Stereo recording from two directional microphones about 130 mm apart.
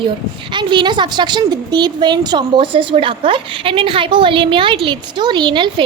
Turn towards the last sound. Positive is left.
turn(degrees=-35)  # may be behind; listen again after turning